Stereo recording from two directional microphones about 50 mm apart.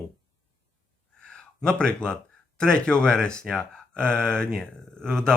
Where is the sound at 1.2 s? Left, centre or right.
Centre.